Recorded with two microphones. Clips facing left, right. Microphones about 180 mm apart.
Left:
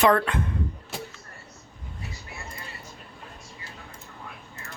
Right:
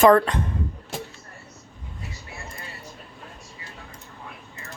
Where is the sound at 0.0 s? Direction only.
40° right (ahead or behind).